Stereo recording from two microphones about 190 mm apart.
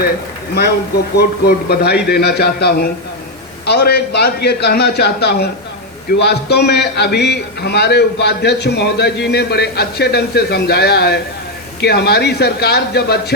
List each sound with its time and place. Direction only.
1.1 s a man's voice: 55° left (ahead or behind)